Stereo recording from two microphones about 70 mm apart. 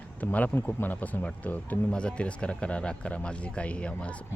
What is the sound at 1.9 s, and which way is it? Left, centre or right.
Speech, centre.